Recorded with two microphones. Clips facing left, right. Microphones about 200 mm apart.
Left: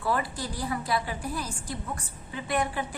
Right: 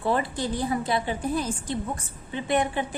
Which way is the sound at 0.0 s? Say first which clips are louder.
Right 4 dB; 25° right (ahead or behind).